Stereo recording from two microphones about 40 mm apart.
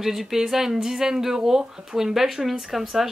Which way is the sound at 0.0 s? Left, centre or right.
Centre.